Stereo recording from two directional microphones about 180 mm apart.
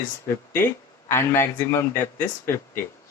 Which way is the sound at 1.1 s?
15° left (ahead or behind).